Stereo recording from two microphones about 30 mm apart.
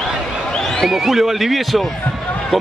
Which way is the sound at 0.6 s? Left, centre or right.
Centre.